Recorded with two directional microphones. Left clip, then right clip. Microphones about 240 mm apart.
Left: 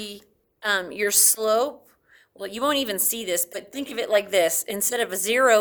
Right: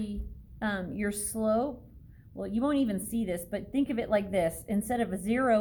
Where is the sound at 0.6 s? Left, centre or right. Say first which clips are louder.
Left 10 dB; left.